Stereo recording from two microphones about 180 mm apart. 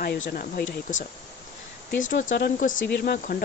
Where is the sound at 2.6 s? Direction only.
50° left (ahead or behind).